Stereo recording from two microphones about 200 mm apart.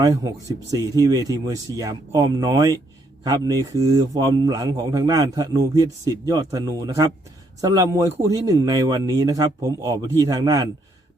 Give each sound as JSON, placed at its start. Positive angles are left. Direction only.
{"t": 0.0, "sound": "a man's voice", "side_deg": -20}